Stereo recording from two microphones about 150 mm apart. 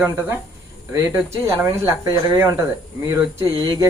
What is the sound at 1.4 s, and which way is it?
Speech, 15° right (ahead or behind).